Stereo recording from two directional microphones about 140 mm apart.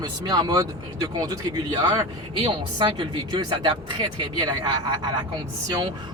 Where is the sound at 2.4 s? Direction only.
35° right (ahead or behind).